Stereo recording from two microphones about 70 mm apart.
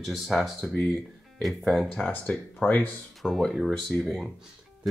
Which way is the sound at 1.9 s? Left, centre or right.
Centre.